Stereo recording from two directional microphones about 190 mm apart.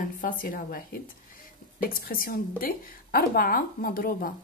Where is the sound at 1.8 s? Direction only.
50° left (ahead or behind).